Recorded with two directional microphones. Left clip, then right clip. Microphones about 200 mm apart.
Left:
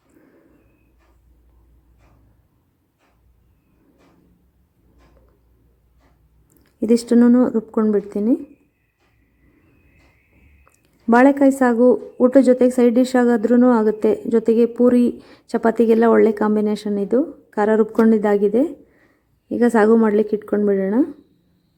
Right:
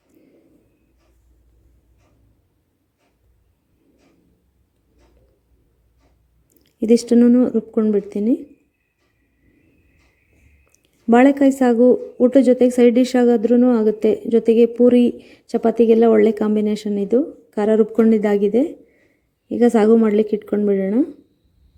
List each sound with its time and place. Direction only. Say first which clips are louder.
7.2 s speech: even; 30° right (ahead or behind)
7.4 s a woman's voice: even; 15° right (ahead or behind)
7.8 s speech: even; 35° right (ahead or behind)
10.8 s a woman's voice: even; 40° right (ahead or behind)